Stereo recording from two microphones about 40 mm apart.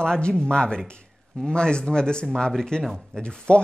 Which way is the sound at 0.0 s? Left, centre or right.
Centre.